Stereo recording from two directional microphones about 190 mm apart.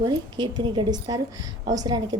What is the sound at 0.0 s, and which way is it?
A woman's voice, 20° right (ahead or behind).